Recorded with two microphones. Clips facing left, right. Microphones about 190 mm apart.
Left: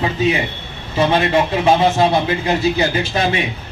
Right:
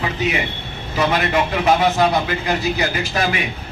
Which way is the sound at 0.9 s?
30° left (ahead or behind).